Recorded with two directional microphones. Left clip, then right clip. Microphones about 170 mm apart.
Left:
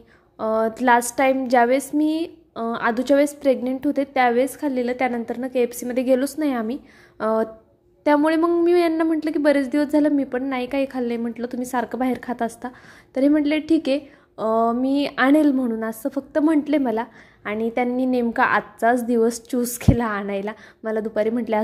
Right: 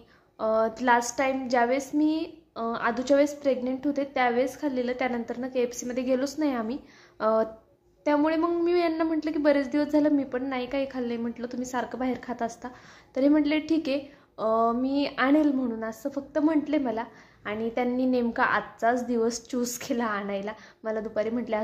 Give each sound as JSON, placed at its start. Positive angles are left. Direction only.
{"t": 0.4, "sound": "a woman's voice", "side_deg": 25}
{"t": 8.5, "sound": "a woman's voice", "side_deg": 20}